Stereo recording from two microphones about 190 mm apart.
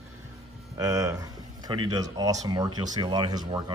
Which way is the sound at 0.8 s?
15° right (ahead or behind).